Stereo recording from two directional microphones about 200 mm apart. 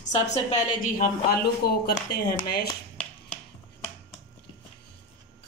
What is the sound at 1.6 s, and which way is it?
Speech, 55° left (ahead or behind).